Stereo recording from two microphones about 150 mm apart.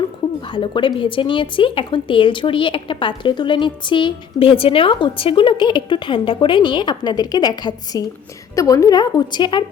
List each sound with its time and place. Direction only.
0.4 s a woman's voice: 35° left (ahead or behind)